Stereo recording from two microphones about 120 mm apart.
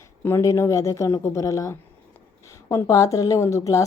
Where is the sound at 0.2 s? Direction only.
20° left (ahead or behind).